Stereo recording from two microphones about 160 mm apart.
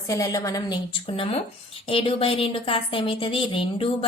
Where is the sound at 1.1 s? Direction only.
35° left (ahead or behind).